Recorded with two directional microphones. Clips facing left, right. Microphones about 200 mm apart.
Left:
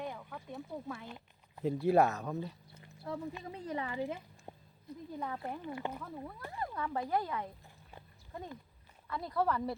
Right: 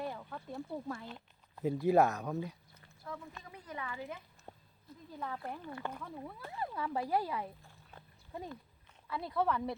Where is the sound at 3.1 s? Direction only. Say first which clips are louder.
Left 7 dB; 25° left (ahead or behind).